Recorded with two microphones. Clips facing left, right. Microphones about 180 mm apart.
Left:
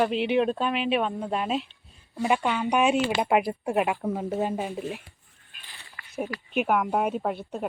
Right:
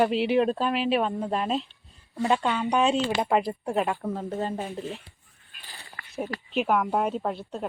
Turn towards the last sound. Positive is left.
turn(degrees=5)  # may be behind; listen again after turning